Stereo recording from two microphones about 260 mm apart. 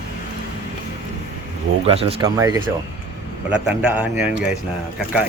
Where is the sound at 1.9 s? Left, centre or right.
Right; by 4.4 s centre.